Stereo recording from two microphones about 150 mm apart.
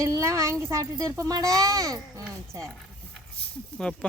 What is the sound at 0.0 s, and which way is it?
A child's voice, 20° right (ahead or behind).